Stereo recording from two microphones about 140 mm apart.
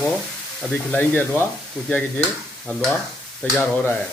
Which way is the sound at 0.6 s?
10° left (ahead or behind).